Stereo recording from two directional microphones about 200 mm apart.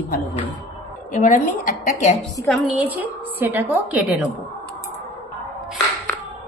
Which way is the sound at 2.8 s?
10° right (ahead or behind).